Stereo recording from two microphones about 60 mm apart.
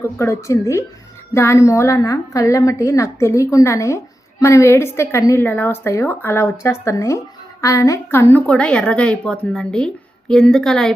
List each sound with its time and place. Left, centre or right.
0.2 s a woman's voice: left
5.4 s a woman's voice: left
8.1 s a woman's voice: left
8.4 s a woman's voice: centre